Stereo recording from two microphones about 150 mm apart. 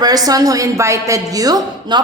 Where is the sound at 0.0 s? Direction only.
25° right (ahead or behind).